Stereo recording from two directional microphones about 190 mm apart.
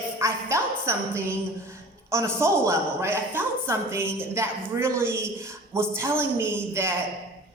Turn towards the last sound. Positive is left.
turn(degrees=-15)  # may be behind; listen again after turning